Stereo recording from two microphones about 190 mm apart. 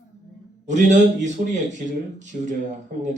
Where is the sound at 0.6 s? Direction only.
40° right (ahead or behind).